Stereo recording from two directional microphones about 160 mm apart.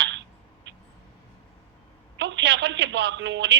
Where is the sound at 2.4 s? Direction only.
90° right.